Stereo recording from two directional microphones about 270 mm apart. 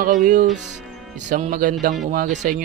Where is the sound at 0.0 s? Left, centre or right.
Right.